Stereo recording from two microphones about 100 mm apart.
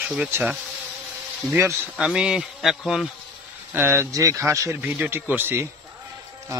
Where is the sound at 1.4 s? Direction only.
30° right (ahead or behind).